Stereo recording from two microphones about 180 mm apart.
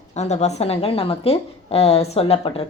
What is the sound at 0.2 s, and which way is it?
A woman's voice, 40° left (ahead or behind).